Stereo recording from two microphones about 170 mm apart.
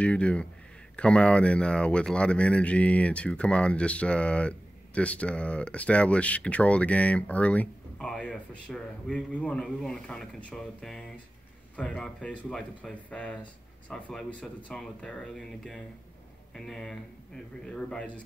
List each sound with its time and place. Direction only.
0.0 s speech: 5° left (ahead or behind)